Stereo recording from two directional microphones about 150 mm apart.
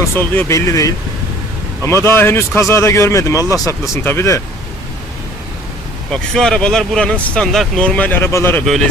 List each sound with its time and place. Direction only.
0.0 s speech: 15° left (ahead or behind)
6.1 s speech: 5° left (ahead or behind)